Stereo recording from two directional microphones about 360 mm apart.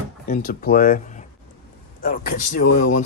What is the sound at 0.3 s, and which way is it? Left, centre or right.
Speech, left.